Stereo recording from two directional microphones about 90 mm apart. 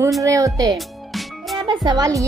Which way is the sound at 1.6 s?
50° right (ahead or behind).